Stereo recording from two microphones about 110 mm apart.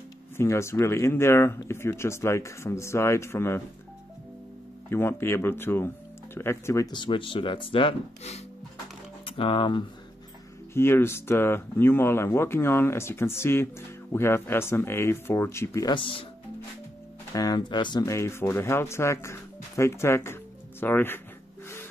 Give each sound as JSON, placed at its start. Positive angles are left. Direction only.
{"t": 0.4, "sound": "speech", "side_deg": 25}
{"t": 4.8, "sound": "speech", "side_deg": 20}
{"t": 6.9, "sound": "speech", "side_deg": 45}
{"t": 10.7, "sound": "speech", "side_deg": 20}
{"t": 15.8, "sound": "speech", "side_deg": 50}
{"t": 17.3, "sound": "speech", "side_deg": 35}
{"t": 18.0, "sound": "speech", "side_deg": 25}